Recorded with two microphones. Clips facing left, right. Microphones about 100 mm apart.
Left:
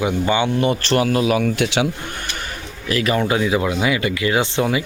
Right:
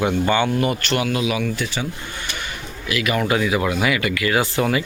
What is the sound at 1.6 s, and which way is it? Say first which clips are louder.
Speech: left 7 dB; 80° left.